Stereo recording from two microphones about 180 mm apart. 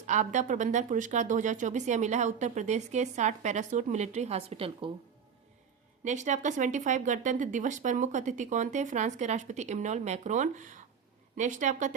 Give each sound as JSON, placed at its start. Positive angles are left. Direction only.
{"t": 0.0, "sound": "speech", "side_deg": -40}
{"t": 6.1, "sound": "speech", "side_deg": -40}